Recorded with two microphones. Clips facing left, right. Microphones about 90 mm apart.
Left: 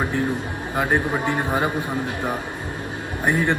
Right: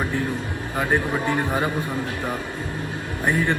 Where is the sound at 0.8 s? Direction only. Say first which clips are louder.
Left 1 dB; 20° left (ahead or behind).